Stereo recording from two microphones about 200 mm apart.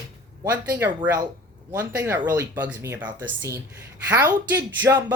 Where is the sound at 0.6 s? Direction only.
10° right (ahead or behind).